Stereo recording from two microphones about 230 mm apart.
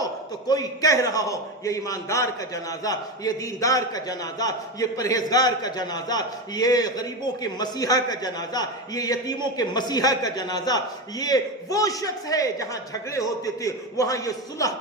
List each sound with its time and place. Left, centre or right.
0.0 s a man's voice: centre